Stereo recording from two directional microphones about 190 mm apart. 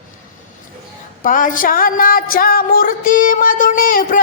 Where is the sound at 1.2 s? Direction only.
45° left (ahead or behind).